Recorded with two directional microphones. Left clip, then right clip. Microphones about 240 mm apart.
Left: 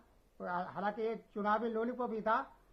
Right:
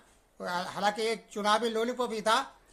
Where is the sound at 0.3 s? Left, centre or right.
Right.